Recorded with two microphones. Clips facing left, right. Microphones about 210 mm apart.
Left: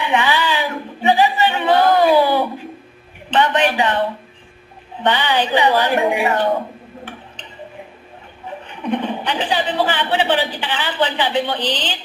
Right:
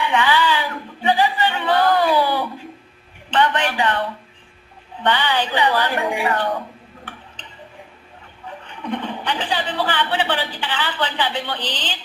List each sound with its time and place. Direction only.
0.0 s a sound: 20° left (ahead or behind)
5.0 s a woman's voice: 20° left (ahead or behind)
8.4 s speech: 20° left (ahead or behind)